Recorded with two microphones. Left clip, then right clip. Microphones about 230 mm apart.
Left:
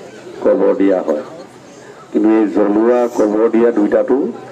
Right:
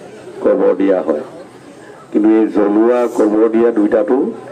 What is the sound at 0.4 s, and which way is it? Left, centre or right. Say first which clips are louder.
Speech: even; right.